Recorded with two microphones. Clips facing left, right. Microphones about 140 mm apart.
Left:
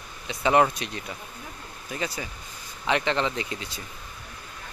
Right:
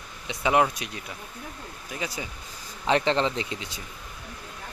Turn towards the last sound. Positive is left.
turn(degrees=-20)  # may be behind; listen again after turning